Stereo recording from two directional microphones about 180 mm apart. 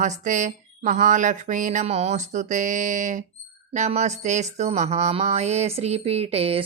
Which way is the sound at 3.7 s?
40° right (ahead or behind).